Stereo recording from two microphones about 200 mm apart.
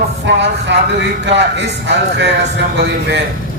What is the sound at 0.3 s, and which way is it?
Speech, 60° right (ahead or behind).